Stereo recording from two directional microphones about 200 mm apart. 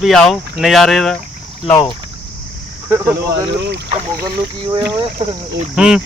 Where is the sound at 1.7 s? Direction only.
15° left (ahead or behind).